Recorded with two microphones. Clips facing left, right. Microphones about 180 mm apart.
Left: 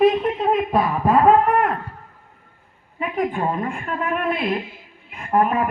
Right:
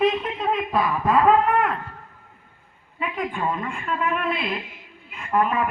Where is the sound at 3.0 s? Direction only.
45° left (ahead or behind).